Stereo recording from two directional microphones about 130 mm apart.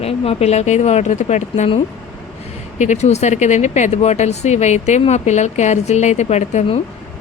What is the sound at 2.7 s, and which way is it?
Speech, 70° left (ahead or behind).